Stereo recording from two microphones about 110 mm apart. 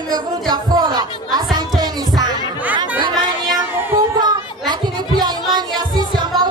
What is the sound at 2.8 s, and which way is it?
Chatter, 40° right (ahead or behind).